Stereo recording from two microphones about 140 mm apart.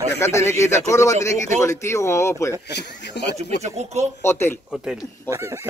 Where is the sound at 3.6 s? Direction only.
55° right (ahead or behind).